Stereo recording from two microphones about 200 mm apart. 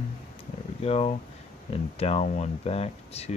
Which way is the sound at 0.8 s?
30° left (ahead or behind).